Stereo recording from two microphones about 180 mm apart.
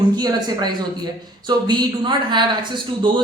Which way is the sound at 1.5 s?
25° right (ahead or behind).